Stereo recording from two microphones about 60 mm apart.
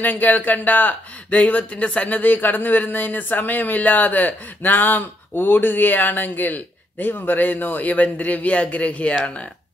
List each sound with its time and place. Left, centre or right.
0.0 s speech: left